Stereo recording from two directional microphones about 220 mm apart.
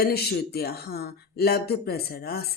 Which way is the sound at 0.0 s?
45° left (ahead or behind).